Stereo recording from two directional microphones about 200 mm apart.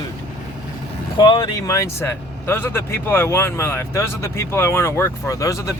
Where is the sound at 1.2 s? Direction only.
20° left (ahead or behind).